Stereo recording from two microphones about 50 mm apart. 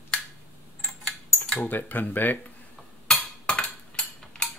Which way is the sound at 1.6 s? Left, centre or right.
Left.